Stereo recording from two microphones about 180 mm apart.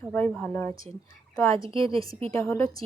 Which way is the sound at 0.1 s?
10° left (ahead or behind).